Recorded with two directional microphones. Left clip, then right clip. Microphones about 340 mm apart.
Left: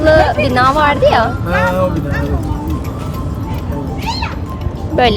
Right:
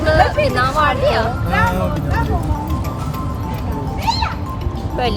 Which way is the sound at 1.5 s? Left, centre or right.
Centre.